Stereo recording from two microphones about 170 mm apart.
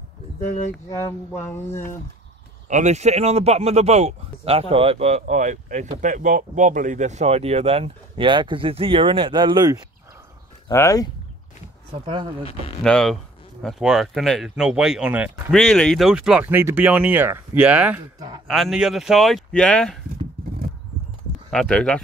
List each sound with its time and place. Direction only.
0.8 s speech: 15° left (ahead or behind)
2.7 s speech: 45° right (ahead or behind); by 9.8 s 25° right (ahead or behind)
10.7 s speech: 20° left (ahead or behind)
12.8 s speech: 5° left (ahead or behind)
15.5 s speech: 5° left (ahead or behind)
21.5 s speech: 5° left (ahead or behind)